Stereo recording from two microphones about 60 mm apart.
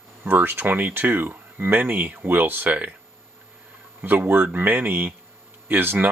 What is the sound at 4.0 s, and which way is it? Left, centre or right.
Speech, right.